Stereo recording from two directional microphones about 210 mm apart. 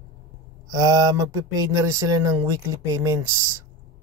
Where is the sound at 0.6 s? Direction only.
15° right (ahead or behind).